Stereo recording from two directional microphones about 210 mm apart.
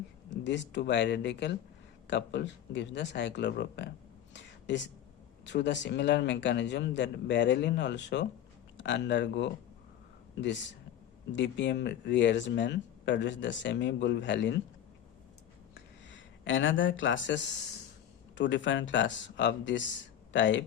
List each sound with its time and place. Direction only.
0.4 s speech: 55° left (ahead or behind)
4.4 s a sound: 60° left (ahead or behind)
5.5 s speech: 55° left (ahead or behind)
11.3 s speech: 55° left (ahead or behind)
16.0 s speech: 65° left (ahead or behind)